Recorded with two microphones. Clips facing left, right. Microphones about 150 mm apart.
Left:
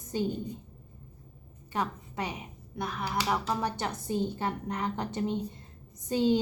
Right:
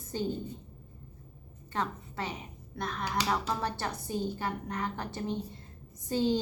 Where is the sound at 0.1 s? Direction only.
15° left (ahead or behind).